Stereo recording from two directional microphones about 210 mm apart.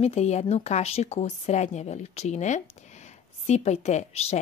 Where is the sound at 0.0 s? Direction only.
30° left (ahead or behind).